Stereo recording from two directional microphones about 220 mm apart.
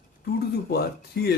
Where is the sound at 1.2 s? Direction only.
50° left (ahead or behind).